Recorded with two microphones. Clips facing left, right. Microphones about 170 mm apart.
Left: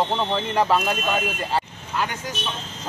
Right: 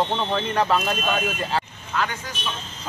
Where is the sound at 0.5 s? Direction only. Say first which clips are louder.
Left 2 dB; 10° left (ahead or behind).